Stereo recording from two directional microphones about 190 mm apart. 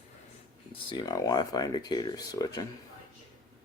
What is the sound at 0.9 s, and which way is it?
Speech, 25° left (ahead or behind).